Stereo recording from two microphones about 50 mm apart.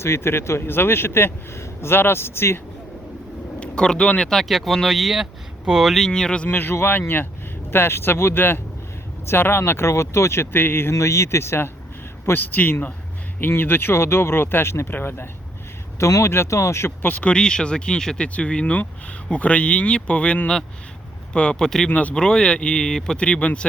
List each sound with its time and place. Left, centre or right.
0.0 s speech: left
3.6 s speech: centre
4.3 s speech: centre
6.1 s speech: centre
6.5 s speech: left
10.9 s speech: left
12.4 s a man's voice: left
16.0 s speech: left
17.0 s a man's voice: left
17.2 s speech: centre
21.6 s speech: centre
21.8 s a man's voice: left
22.1 s speech: centre
23.1 s speech: left